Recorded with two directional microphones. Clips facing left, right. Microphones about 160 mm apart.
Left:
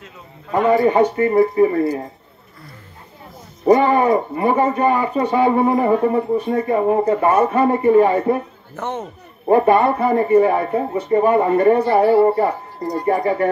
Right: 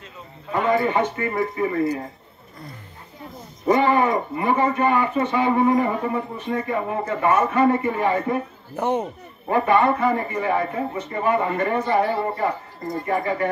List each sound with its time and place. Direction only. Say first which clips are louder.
0.7 s speech: left 6 dB; 35° left (ahead or behind)
3.6 s speech: left 5 dB; 45° left (ahead or behind)
8.7 s speech: right 3 dB; 10° right (ahead or behind)
9.5 s speech: left 5 dB; 40° left (ahead or behind)
11.9 s speech: left 7 dB; 10° left (ahead or behind)
12.2 s speech: left 9 dB; 30° left (ahead or behind)